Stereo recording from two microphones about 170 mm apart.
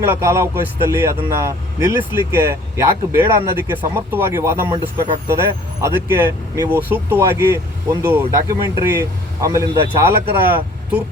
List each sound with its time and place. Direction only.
0.0 s speech: 15° right (ahead or behind)